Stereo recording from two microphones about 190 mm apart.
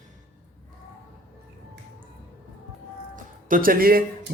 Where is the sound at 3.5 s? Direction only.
50° right (ahead or behind).